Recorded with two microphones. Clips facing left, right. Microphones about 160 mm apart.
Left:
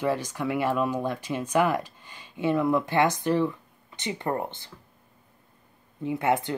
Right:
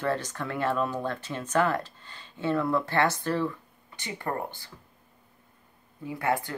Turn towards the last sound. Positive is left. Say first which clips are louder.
# left 4 dB
turn(degrees=20)  # may be behind; listen again after turning